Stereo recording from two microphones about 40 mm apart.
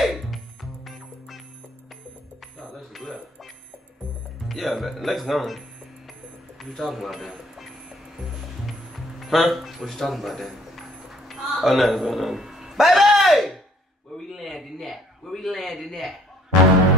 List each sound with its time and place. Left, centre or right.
0.0 s music: centre
2.9 s a sound: centre
4.5 s speech: centre
6.6 s speech: centre
8.6 s music: centre
9.8 s a sound: centre